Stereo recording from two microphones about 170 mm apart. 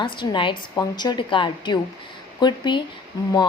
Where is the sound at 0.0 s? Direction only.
30° left (ahead or behind).